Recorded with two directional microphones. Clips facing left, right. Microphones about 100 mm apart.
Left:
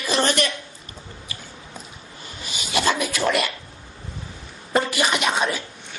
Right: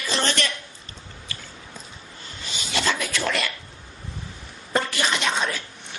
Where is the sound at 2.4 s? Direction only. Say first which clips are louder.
Left 3 dB; 15° left (ahead or behind).